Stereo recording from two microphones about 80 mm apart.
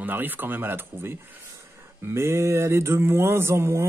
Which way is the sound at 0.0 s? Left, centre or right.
Right.